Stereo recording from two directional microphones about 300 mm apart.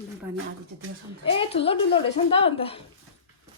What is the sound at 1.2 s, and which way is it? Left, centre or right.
A woman's voice, centre.